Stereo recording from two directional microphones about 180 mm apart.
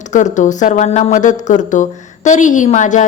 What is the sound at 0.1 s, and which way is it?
Speech, 40° left (ahead or behind).